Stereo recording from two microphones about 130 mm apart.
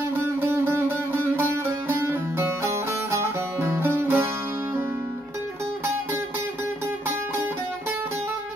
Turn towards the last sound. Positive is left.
turn(degrees=-20)  # may be behind; listen again after turning